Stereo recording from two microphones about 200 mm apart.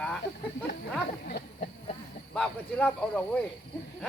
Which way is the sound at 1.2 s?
40° left (ahead or behind).